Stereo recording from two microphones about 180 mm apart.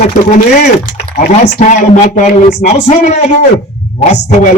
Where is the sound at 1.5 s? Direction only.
45° left (ahead or behind).